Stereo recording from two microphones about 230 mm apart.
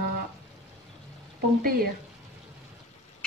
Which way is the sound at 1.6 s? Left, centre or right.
Right.